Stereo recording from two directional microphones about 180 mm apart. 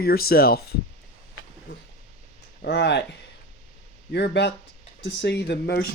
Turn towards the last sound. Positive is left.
turn(degrees=70)  # may be behind; listen again after turning